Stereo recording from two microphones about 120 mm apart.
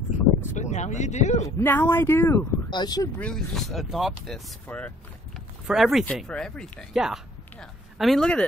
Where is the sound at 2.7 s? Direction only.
35° left (ahead or behind).